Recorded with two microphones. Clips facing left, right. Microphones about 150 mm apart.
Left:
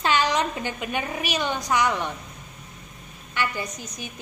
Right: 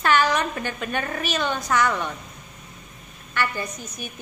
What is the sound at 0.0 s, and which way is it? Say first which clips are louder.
A woman's voice: right 2 dB; 15° left (ahead or behind).